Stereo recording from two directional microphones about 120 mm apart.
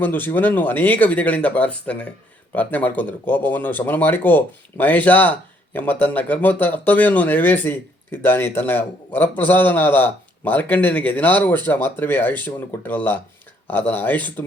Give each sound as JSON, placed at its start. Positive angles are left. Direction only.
{"t": 0.0, "sound": "speech", "side_deg": 15}